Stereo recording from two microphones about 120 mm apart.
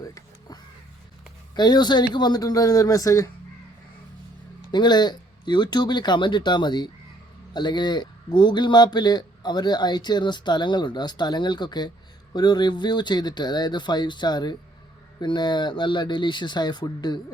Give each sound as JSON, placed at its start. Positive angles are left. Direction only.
{"t": 0.0, "sound": "a sound", "side_deg": 30}
{"t": 1.5, "sound": "speech", "side_deg": 35}
{"t": 4.7, "sound": "speech", "side_deg": 35}